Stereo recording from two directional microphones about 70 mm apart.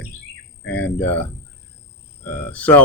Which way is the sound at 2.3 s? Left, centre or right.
Left.